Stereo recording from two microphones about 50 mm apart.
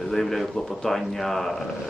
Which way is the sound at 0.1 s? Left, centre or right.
Centre.